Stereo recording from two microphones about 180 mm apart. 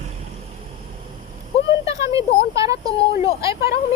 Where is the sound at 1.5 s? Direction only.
35° left (ahead or behind).